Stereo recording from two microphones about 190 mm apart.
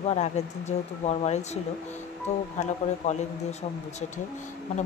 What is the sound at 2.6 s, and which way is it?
Speech, 40° left (ahead or behind).